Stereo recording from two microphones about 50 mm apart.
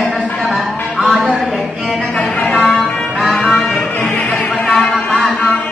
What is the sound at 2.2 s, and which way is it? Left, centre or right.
Music, left.